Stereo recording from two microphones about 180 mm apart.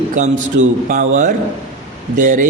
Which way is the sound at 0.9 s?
45° right (ahead or behind).